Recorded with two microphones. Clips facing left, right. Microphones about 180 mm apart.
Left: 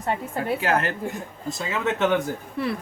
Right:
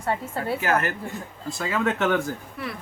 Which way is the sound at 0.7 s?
30° left (ahead or behind).